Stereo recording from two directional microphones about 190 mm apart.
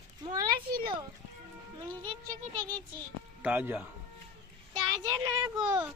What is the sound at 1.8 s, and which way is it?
Speech, 25° right (ahead or behind).